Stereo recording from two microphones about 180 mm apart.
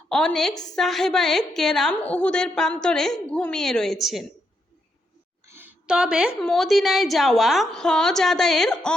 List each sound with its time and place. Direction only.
0.1 s a woman's voice: 5° left (ahead or behind)
0.5 s a woman's voice: 20° left (ahead or behind)
0.8 s a woman's voice: centre (ahead or behind)
5.5 s a woman's voice: 10° right (ahead or behind)